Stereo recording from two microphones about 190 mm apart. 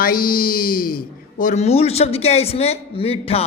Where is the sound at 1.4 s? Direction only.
35° left (ahead or behind).